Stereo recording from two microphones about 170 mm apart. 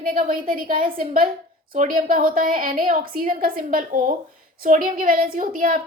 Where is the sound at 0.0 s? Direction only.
55° right (ahead or behind).